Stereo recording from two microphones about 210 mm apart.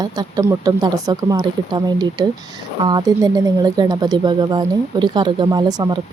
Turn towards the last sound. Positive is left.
turn(degrees=-20)  # may be behind; listen again after turning